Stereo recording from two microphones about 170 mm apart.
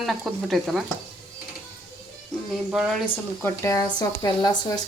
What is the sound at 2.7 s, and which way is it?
Speech, 5° right (ahead or behind).